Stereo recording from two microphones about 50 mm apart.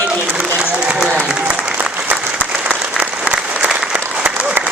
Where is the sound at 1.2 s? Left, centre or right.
Right.